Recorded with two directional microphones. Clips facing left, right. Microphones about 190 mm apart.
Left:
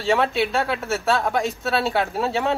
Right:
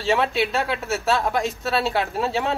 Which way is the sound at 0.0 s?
Centre (ahead or behind).